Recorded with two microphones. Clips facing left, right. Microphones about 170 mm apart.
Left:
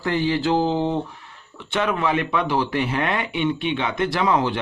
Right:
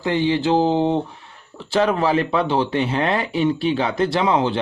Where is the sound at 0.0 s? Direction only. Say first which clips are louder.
Right 2 dB; 20° right (ahead or behind).